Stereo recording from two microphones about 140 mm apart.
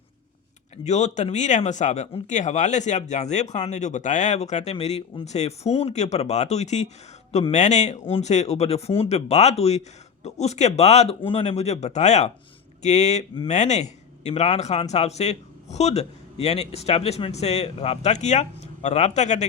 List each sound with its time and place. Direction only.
0.9 s a man's voice: 55° left (ahead or behind)